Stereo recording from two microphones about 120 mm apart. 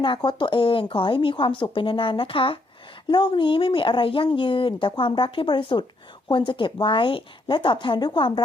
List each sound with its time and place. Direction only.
0.0 s a woman's voice: 40° left (ahead or behind)